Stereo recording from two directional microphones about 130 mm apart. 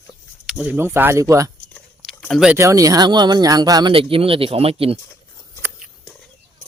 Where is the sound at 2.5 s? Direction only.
25° right (ahead or behind).